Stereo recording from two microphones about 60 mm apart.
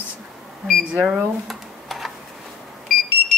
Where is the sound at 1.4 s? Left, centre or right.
Centre.